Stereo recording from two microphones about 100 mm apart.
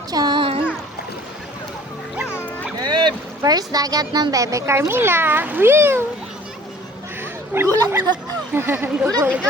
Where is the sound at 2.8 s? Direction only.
50° right (ahead or behind); by 6.0 s 25° right (ahead or behind).